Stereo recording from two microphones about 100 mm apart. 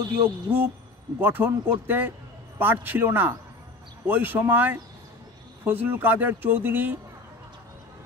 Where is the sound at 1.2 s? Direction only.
20° right (ahead or behind).